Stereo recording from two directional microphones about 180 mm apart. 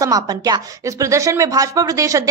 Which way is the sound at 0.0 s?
20° right (ahead or behind).